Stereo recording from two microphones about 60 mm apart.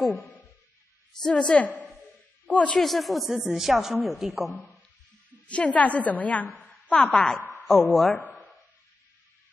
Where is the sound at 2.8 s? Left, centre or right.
Centre.